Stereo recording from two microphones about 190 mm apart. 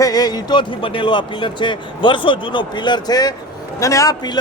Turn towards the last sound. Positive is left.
turn(degrees=20)  # may be behind; listen again after turning